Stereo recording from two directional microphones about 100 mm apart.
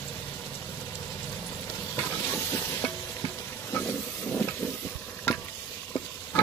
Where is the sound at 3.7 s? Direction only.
20° left (ahead or behind).